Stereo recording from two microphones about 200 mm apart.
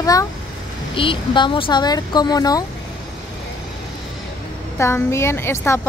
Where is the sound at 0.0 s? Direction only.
15° left (ahead or behind).